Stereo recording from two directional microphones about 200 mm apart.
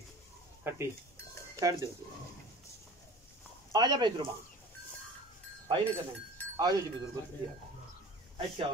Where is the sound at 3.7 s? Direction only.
20° right (ahead or behind).